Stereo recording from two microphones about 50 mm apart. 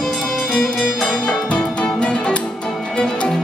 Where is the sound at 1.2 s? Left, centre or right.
Centre.